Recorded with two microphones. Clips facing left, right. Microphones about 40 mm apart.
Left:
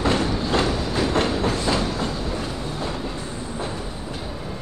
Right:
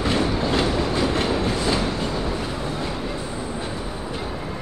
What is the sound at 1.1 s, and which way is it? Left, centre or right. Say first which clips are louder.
Train: left 1 dB; left.